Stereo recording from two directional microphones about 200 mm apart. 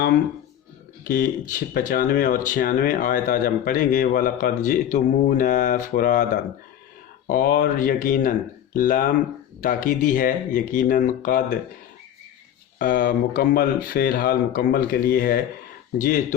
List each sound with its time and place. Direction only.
1.0 s speech: 45° left (ahead or behind)
12.8 s speech: 45° left (ahead or behind)